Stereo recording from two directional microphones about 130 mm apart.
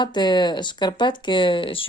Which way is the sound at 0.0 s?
35° left (ahead or behind).